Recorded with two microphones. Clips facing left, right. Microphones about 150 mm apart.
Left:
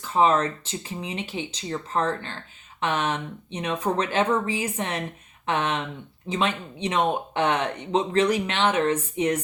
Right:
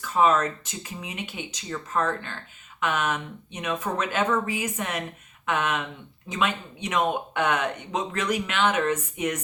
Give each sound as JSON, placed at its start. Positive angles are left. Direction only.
{"t": 0.0, "sound": "speech", "side_deg": 30}